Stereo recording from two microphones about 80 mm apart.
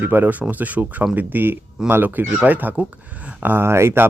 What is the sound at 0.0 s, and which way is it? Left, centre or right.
Speech, right.